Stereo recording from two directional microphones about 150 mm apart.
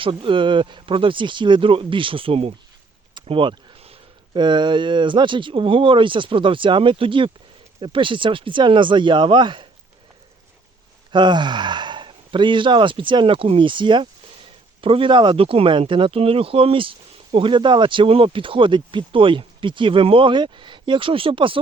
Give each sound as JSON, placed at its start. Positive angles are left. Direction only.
{"t": 0.0, "sound": "speech", "side_deg": -35}
{"t": 3.2, "sound": "a sound", "side_deg": -35}
{"t": 4.4, "sound": "speech", "side_deg": -30}
{"t": 11.1, "sound": "speech", "side_deg": -30}